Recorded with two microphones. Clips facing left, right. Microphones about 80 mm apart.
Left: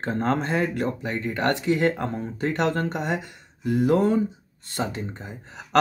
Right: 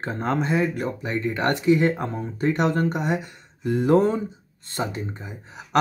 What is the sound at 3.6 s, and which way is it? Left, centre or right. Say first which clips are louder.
Speech: right 2 dB; right.